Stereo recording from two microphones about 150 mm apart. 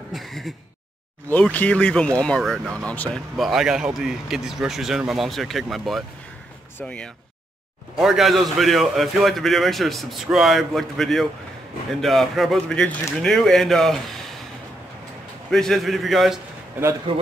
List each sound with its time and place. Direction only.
0.1 s a man's voice: centre (ahead or behind)
15.5 s a man's voice: centre (ahead or behind)
17.1 s a man's voice: 35° right (ahead or behind)